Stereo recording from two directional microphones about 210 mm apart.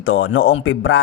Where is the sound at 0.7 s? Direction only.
65° left (ahead or behind).